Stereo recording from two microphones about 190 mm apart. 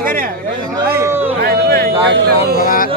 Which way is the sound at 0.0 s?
50° right (ahead or behind).